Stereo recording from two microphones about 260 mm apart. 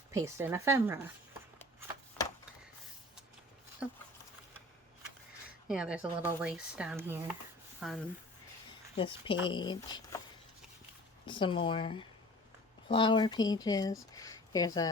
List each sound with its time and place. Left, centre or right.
0.1 s speech: centre
3.8 s speech: centre
5.6 s speech: centre
9.0 s speech: centre
11.3 s speech: centre